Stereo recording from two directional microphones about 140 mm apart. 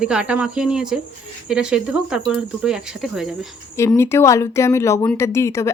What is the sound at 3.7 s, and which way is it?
Speech, 20° left (ahead or behind).